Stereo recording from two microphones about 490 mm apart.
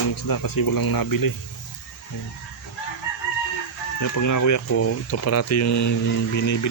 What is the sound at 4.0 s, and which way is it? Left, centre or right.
Speech, left.